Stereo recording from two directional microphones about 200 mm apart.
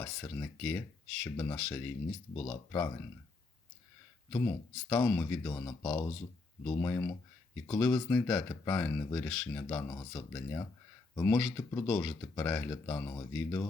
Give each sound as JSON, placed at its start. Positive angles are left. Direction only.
{"t": 0.0, "sound": "speech", "side_deg": 15}
{"t": 4.3, "sound": "speech", "side_deg": 5}
{"t": 6.7, "sound": "speech", "side_deg": 10}
{"t": 11.1, "sound": "speech", "side_deg": 10}
{"t": 12.7, "sound": "speech", "side_deg": 15}